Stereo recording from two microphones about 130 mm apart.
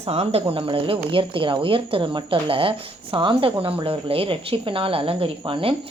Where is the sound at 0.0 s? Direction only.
50° right (ahead or behind).